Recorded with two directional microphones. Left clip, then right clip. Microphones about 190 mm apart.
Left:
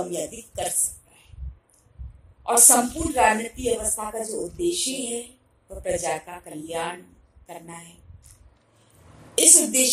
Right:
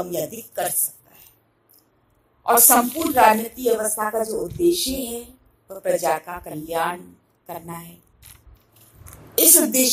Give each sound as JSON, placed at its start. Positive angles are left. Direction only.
{"t": 0.0, "sound": "a woman's voice", "side_deg": -20}
{"t": 2.7, "sound": "a woman's voice", "side_deg": -20}
{"t": 9.3, "sound": "a woman's voice", "side_deg": -20}